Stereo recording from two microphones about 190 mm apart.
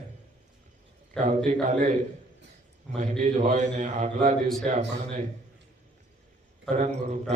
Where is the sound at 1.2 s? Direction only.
40° right (ahead or behind).